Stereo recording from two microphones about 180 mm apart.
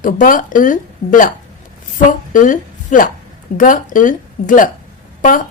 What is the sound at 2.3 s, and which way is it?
A woman's voice, 45° left (ahead or behind).